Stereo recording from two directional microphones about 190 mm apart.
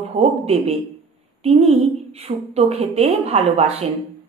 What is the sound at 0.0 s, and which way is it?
A woman's voice, 35° right (ahead or behind).